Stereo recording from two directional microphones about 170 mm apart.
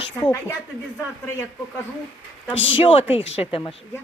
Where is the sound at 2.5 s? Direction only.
90° left.